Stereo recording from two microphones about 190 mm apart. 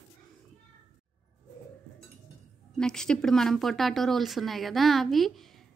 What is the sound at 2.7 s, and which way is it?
A woman's voice, 5° left (ahead or behind).